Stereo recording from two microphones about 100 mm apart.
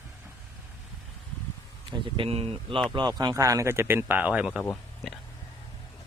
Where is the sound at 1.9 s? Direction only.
65° right (ahead or behind).